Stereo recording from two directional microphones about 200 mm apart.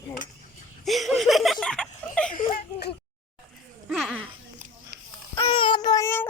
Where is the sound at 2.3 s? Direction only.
45° left (ahead or behind).